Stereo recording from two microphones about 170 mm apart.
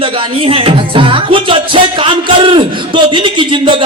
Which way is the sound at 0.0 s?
30° right (ahead or behind).